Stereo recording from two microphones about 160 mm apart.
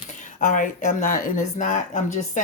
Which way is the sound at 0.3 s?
55° left (ahead or behind).